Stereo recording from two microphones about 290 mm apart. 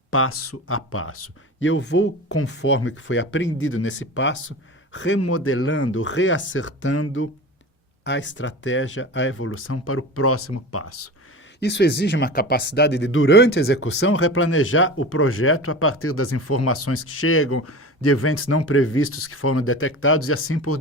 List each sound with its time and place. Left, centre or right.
0.1 s speech: left
11.6 s speech: left